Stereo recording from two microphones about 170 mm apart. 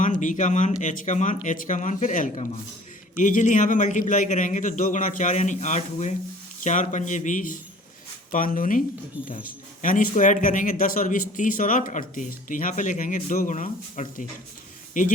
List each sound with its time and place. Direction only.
0.0 s speech: 50° left (ahead or behind)